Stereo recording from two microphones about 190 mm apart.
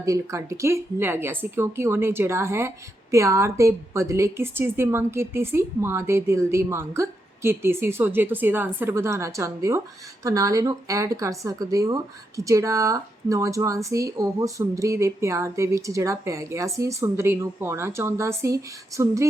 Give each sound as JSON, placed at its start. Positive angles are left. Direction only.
{"t": 0.0, "sound": "a woman's voice", "side_deg": -15}